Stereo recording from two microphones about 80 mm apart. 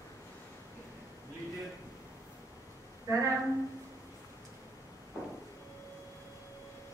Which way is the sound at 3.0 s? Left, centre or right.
Right.